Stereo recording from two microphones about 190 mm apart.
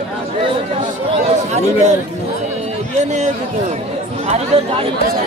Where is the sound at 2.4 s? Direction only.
35° right (ahead or behind).